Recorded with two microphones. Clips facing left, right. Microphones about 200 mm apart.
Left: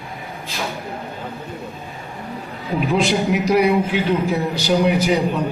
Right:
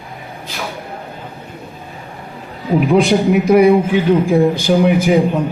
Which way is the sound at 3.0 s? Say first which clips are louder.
Right 5 dB; 55° right (ahead or behind).